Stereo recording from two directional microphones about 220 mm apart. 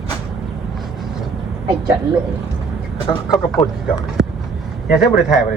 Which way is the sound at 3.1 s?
15° left (ahead or behind).